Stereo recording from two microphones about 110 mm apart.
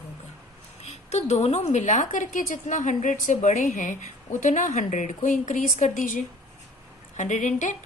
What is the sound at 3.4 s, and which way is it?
A woman's voice, 90° left.